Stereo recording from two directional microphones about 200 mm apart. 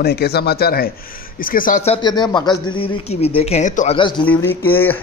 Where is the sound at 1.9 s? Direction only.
20° left (ahead or behind).